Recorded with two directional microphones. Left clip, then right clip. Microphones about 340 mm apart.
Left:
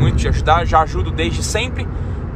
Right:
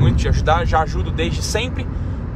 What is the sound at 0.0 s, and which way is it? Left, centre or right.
Speech, centre.